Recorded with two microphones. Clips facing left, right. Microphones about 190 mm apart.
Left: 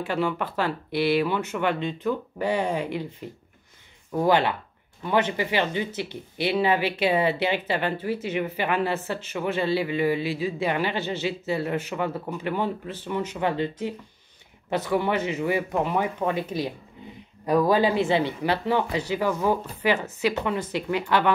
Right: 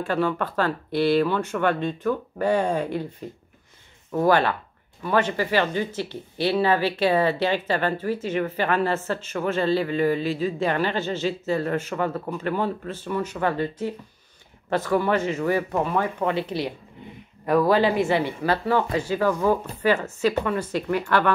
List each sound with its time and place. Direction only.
0.0 s speech: 10° left (ahead or behind)
4.3 s speech: 15° left (ahead or behind)
16.4 s speech: 20° right (ahead or behind)
17.5 s speech: 15° left (ahead or behind)